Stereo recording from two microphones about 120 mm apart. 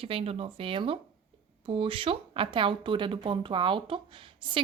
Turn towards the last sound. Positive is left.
turn(degrees=-45)  # may be behind; listen again after turning